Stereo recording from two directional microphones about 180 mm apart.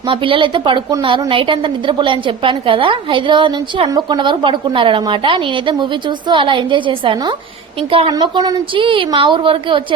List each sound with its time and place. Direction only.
0.1 s a woman's voice: 30° right (ahead or behind)
8.1 s a woman's voice: 20° right (ahead or behind)